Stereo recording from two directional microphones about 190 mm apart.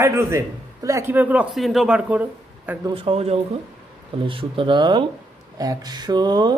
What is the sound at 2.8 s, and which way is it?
A man's voice, 25° right (ahead or behind).